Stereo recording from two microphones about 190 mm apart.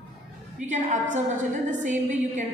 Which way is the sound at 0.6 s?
40° right (ahead or behind).